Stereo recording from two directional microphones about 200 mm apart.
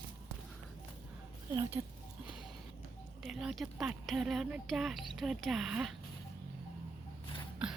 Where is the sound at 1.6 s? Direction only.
15° right (ahead or behind).